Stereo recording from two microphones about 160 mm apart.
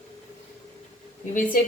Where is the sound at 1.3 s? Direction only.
60° left (ahead or behind).